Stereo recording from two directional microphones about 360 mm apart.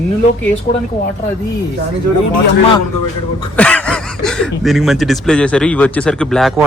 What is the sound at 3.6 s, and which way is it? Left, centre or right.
Speech, centre.